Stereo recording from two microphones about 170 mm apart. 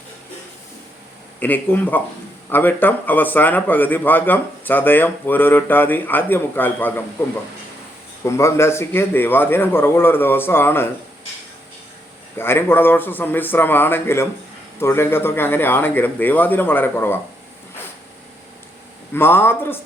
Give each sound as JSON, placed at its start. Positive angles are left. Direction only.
{"t": 1.4, "sound": "a man's voice", "side_deg": 10}
{"t": 8.2, "sound": "a man's voice", "side_deg": 15}
{"t": 12.4, "sound": "a man's voice", "side_deg": 15}
{"t": 19.1, "sound": "a man's voice", "side_deg": 15}